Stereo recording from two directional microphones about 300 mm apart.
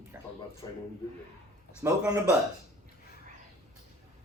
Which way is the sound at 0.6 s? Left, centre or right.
Centre.